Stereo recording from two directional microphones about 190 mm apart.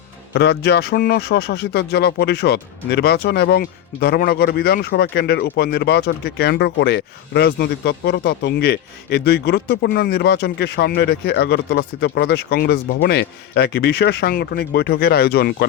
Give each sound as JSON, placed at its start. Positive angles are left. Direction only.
{"t": 0.3, "sound": "speech", "side_deg": 60}